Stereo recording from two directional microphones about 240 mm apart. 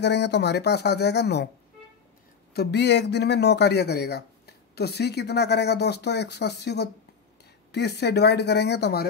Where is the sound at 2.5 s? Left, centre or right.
Left.